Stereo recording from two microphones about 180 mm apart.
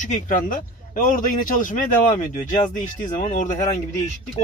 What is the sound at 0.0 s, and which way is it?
A man's voice, 45° left (ahead or behind).